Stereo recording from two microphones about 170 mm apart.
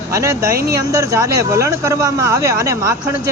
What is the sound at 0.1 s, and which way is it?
Speech, 20° right (ahead or behind).